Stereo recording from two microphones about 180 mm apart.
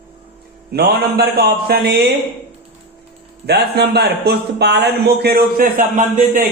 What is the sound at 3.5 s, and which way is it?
A man's voice, 65° right (ahead or behind).